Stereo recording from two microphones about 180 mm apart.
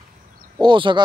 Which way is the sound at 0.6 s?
25° right (ahead or behind).